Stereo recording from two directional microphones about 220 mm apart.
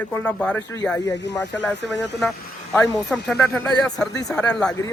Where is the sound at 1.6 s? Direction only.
Centre (ahead or behind).